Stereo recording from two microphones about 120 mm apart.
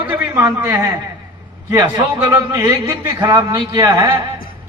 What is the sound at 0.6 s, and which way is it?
A man's voice, 30° right (ahead or behind).